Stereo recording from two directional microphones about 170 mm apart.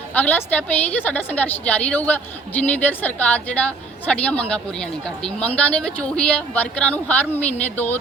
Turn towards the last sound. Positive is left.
turn(degrees=10)  # may be behind; listen again after turning